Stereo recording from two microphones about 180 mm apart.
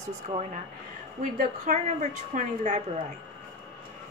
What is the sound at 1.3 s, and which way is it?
Speech, 40° right (ahead or behind).